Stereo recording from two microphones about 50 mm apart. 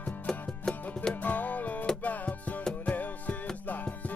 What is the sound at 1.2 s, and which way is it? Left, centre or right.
Music, left.